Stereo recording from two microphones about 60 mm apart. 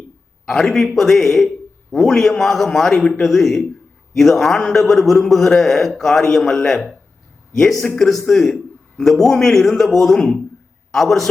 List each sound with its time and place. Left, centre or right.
0.4 s a man's voice: centre